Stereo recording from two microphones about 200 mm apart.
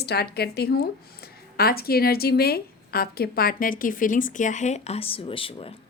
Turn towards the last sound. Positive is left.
turn(degrees=25)  # may be behind; listen again after turning